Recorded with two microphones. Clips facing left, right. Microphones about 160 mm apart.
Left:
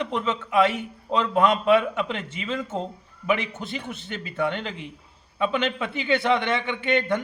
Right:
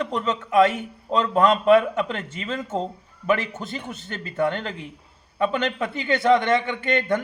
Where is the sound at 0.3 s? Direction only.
45° right (ahead or behind).